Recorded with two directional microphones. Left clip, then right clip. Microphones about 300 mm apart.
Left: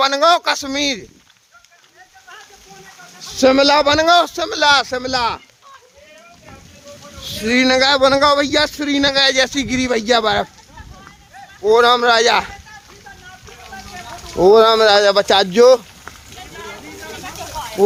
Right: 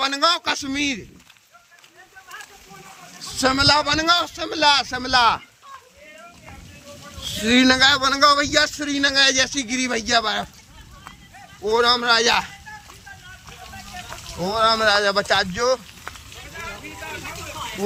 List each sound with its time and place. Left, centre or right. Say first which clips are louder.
0.0 s a man's voice: left 7 dB; centre
3.2 s a man's voice: left 7 dB; centre
7.2 s a man's voice: left 2 dB; centre
11.6 s a man's voice: left 7 dB; centre
14.5 s speech: left 6 dB; centre